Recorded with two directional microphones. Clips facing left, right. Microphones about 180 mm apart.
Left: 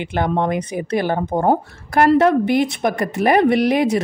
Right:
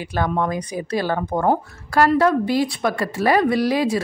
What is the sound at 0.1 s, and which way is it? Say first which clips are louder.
A woman's voice: left 2 dB; 25° left (ahead or behind).